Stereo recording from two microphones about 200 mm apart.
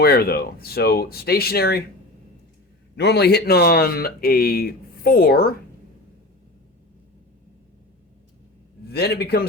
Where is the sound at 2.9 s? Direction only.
55° left (ahead or behind).